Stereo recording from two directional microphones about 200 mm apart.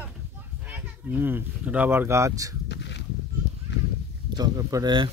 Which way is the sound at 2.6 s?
60° left (ahead or behind).